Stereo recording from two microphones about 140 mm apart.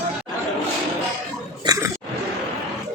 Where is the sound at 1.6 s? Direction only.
25° right (ahead or behind).